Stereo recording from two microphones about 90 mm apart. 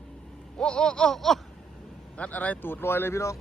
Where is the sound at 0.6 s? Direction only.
10° left (ahead or behind).